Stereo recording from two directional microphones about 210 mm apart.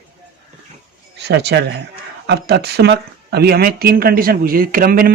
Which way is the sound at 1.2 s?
55° right (ahead or behind).